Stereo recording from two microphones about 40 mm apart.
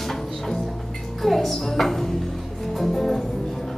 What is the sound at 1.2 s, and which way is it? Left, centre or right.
Music, centre.